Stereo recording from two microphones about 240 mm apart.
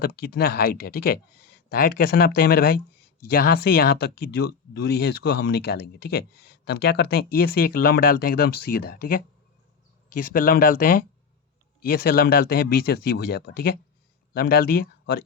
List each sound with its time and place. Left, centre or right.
0.0 s speech: left